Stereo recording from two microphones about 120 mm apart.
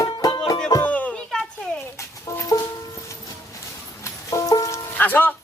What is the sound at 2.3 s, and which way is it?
Music, 30° left (ahead or behind).